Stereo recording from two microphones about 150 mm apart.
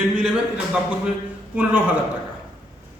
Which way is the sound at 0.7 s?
5° right (ahead or behind).